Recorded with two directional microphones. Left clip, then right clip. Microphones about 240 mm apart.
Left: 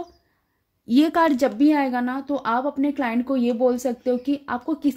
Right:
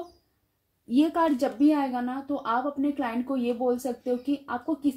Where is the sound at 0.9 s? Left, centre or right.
Left.